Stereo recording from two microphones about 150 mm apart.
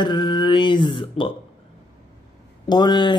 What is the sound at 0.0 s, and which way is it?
Mantra, 30° left (ahead or behind).